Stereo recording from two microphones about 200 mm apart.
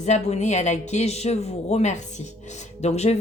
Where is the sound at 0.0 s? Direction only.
35° left (ahead or behind).